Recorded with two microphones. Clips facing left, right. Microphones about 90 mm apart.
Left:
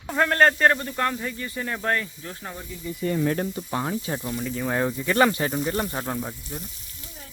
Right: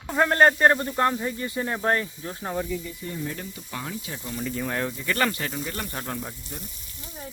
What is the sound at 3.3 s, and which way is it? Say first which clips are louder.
Speech: left 8 dB; 40° left (ahead or behind).